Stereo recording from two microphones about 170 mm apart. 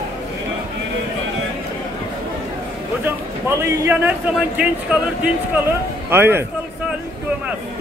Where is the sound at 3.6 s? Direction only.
15° right (ahead or behind).